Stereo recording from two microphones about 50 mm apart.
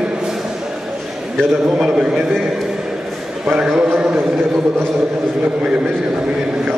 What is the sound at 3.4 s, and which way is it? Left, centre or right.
Speech, centre.